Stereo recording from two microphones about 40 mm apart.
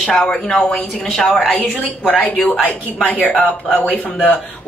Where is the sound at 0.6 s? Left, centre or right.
Left.